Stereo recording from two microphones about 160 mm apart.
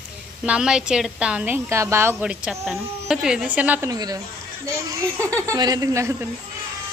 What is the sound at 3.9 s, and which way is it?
Speech, 25° right (ahead or behind).